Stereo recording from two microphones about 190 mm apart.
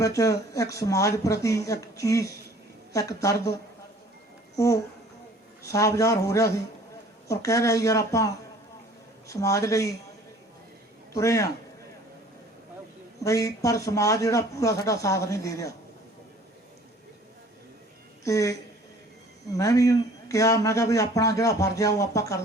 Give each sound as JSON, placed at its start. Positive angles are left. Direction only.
{"t": 0.0, "sound": "a man's voice", "side_deg": 15}
{"t": 4.5, "sound": "a man's voice", "side_deg": 15}
{"t": 11.1, "sound": "a man's voice", "side_deg": 15}
{"t": 13.2, "sound": "a man's voice", "side_deg": 15}
{"t": 18.3, "sound": "a man's voice", "side_deg": 15}
{"t": 19.5, "sound": "a man's voice", "side_deg": 15}